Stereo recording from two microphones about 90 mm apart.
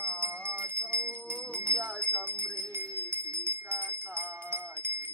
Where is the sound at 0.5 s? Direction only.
25° right (ahead or behind).